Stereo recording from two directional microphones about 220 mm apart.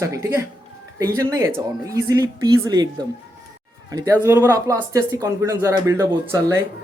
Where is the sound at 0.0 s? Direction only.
15° right (ahead or behind).